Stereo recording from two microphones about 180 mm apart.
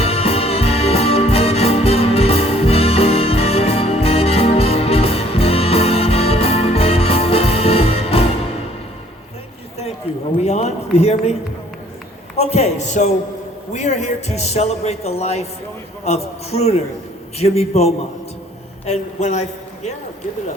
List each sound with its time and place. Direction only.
0.0 s music: 35° left (ahead or behind)
10.4 s a sound: 35° left (ahead or behind)
12.4 s a man's voice: 35° left (ahead or behind)